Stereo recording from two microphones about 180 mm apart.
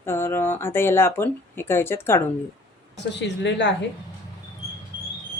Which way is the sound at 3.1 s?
75° left (ahead or behind).